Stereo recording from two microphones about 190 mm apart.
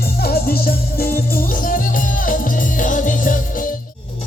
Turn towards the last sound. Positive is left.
turn(degrees=45)  # may be behind; listen again after turning